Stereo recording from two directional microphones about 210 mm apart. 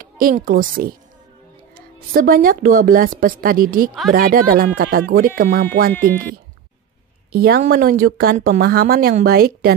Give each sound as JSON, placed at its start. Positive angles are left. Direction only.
{"t": 0.0, "sound": "a child's voice", "side_deg": -40}
{"t": 2.1, "sound": "a woman's voice", "side_deg": -45}
{"t": 7.3, "sound": "a woman's voice", "side_deg": -45}